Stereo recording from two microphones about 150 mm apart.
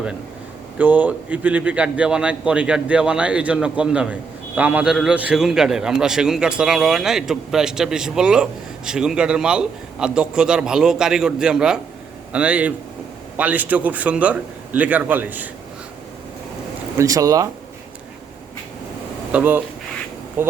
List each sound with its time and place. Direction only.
0.8 s a man's voice: 10° right (ahead or behind)
17.0 s speech: 20° right (ahead or behind)
19.3 s a man's voice: 10° right (ahead or behind)